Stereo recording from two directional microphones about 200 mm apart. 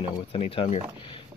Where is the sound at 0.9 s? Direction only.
25° left (ahead or behind).